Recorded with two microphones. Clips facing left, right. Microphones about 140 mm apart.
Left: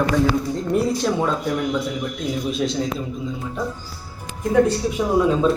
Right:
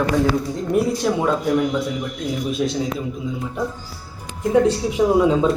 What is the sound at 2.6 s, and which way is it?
Speech, centre (ahead or behind).